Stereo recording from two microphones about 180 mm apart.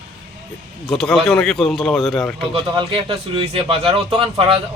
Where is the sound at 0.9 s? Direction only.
5° left (ahead or behind).